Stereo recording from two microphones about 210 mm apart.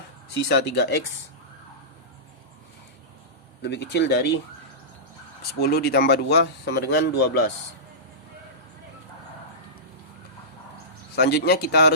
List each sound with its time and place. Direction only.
0.4 s speech: 50° left (ahead or behind)
3.6 s speech: 55° left (ahead or behind)
5.4 s speech: 50° left (ahead or behind)
11.1 s speech: 50° left (ahead or behind)